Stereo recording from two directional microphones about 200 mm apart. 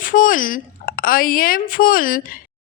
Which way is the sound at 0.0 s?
40° left (ahead or behind).